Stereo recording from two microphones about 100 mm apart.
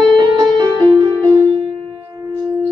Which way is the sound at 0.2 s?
50° right (ahead or behind).